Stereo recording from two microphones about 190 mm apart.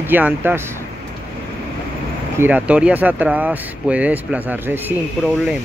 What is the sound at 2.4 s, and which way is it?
Speech, 5° right (ahead or behind).